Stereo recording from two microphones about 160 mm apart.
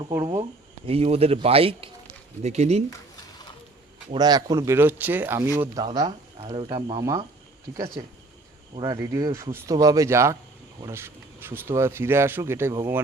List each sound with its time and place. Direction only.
0.9 s speech: 40° right (ahead or behind)
4.1 s speech: 25° right (ahead or behind)
5.7 s speech: 25° right (ahead or behind)
8.7 s speech: 25° right (ahead or behind)